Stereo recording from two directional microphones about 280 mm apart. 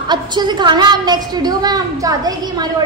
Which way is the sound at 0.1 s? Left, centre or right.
Centre.